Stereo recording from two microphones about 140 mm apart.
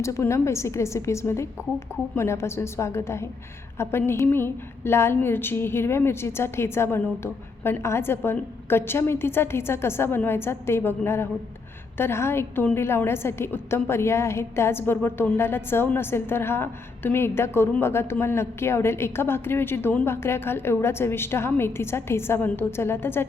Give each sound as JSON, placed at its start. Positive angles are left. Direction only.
{"t": 0.0, "sound": "a woman's voice", "side_deg": 20}